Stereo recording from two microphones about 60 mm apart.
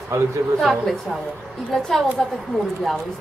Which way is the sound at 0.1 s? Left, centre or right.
Right.